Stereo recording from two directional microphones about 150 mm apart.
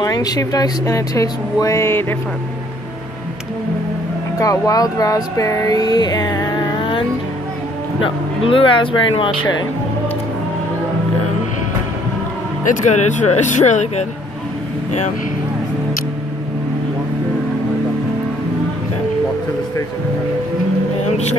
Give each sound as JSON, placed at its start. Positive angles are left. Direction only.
{"t": 0.0, "sound": "speech", "side_deg": 25}
{"t": 4.4, "sound": "a sound", "side_deg": 25}
{"t": 8.0, "sound": "speech", "side_deg": 35}
{"t": 12.8, "sound": "speech", "side_deg": 50}